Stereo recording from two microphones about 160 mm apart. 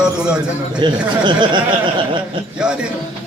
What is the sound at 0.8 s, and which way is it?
Speech, 30° right (ahead or behind).